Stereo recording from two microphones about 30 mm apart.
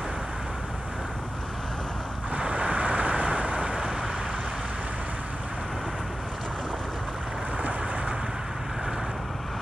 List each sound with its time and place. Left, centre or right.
2.3 s vehicle: right
3.7 s vehicle: centre